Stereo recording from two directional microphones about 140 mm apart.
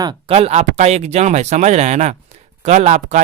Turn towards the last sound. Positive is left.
turn(degrees=-55)  # may be behind; listen again after turning